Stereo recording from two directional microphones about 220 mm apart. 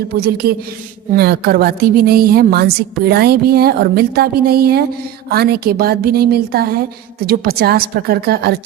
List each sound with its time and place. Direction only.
0.1 s a woman's voice: 45° right (ahead or behind)